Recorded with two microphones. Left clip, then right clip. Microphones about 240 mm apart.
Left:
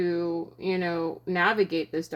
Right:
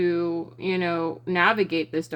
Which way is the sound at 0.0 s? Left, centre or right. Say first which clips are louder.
Right 3 dB; right.